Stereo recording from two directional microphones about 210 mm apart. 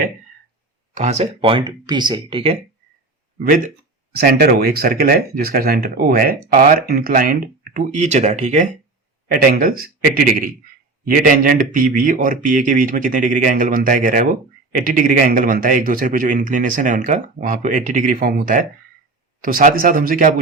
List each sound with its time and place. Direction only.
0.9 s speech: 30° right (ahead or behind)
4.1 s a man's voice: 50° right (ahead or behind)